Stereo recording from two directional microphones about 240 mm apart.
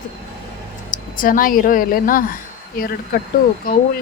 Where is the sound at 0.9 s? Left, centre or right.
Left.